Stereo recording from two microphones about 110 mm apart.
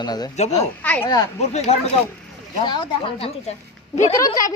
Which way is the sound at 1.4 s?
75° left (ahead or behind).